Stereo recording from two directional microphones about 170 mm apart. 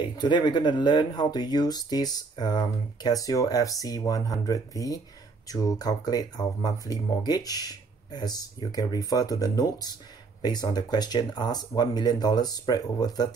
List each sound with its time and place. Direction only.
0.0 s speech: 25° left (ahead or behind)